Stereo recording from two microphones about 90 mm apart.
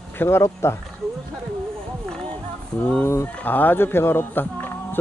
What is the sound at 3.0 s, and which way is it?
Speech, 30° left (ahead or behind).